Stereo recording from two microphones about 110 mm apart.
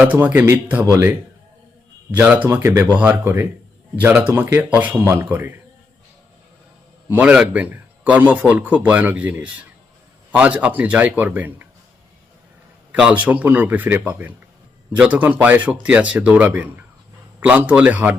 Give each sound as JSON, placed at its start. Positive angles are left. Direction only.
{"t": 0.0, "sound": "a man's voice", "side_deg": -15}
{"t": 2.2, "sound": "speech", "side_deg": -15}
{"t": 7.1, "sound": "a man's voice", "side_deg": -10}
{"t": 13.0, "sound": "a man's voice", "side_deg": -10}